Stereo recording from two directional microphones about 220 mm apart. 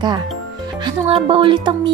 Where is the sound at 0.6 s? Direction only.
20° right (ahead or behind).